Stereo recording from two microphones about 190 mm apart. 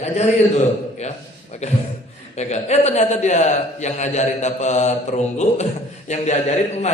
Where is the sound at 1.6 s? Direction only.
35° left (ahead or behind).